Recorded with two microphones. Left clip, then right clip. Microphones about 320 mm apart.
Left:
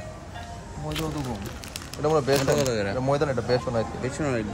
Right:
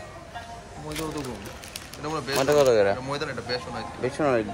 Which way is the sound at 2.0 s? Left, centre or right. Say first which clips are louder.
Left 3 dB; left.